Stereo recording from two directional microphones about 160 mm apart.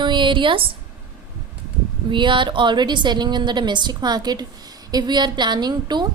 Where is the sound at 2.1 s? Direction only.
30° right (ahead or behind).